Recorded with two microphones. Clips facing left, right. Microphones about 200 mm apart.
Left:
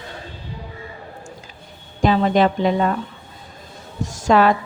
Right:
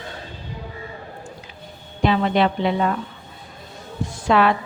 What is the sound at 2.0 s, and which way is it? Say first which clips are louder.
Speech: left 2 dB; 40° left (ahead or behind).